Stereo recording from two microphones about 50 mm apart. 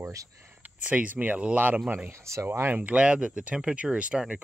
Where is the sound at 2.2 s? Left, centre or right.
Right.